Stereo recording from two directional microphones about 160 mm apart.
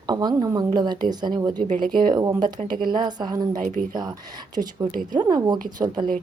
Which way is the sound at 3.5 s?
55° right (ahead or behind).